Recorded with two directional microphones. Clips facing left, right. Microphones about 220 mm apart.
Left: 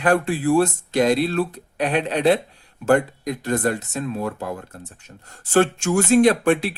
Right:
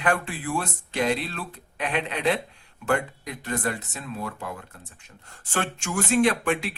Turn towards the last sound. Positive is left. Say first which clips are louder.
# left 7 dB
turn(degrees=35)  # may be behind; listen again after turning